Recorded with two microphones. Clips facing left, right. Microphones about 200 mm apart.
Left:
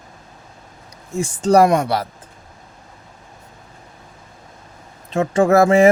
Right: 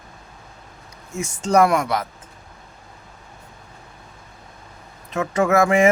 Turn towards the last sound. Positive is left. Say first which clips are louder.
# left 4 dB
turn(degrees=35)  # may be behind; listen again after turning